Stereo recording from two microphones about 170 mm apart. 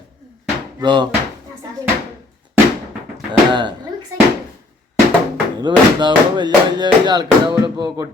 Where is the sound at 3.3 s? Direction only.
25° right (ahead or behind).